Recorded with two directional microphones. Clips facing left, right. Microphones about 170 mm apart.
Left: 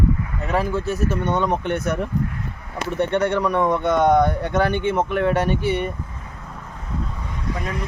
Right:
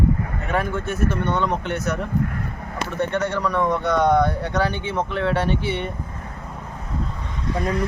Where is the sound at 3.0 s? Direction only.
25° left (ahead or behind).